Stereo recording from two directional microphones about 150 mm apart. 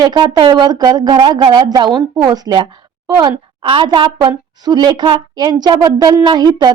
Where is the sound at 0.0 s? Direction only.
30° right (ahead or behind).